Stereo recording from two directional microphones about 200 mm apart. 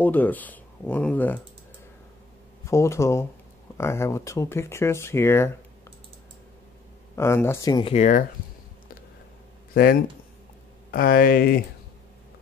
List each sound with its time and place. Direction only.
0.0 s speech: 10° left (ahead or behind)
2.6 s speech: 15° left (ahead or behind)
7.2 s speech: 10° left (ahead or behind)
7.9 s speech: 35° left (ahead or behind)
9.8 s speech: 45° left (ahead or behind)